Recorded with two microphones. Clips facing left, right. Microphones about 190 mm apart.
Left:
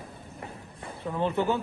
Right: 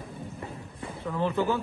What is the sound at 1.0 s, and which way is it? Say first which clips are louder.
Speech: even; 20° left (ahead or behind).